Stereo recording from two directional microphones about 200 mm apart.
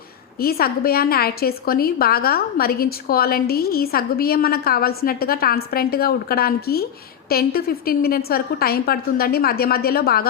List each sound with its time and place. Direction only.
0.3 s a woman's voice: 50° left (ahead or behind)